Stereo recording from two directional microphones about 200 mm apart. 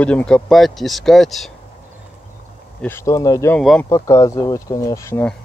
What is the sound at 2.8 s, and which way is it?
Speech, 10° left (ahead or behind).